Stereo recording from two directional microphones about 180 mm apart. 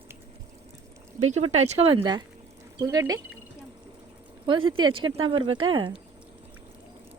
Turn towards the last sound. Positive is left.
turn(degrees=-30)  # may be behind; listen again after turning